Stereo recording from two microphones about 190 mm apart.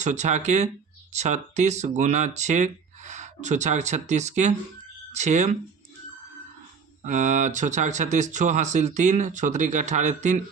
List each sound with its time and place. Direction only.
0.0 s speech: 40° right (ahead or behind)
7.0 s speech: 40° right (ahead or behind)